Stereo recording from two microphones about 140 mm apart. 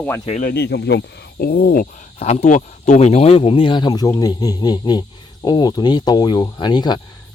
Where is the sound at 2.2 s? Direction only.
55° left (ahead or behind).